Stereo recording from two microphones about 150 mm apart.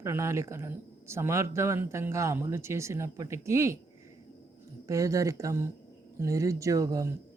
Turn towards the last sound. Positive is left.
turn(degrees=-20)  # may be behind; listen again after turning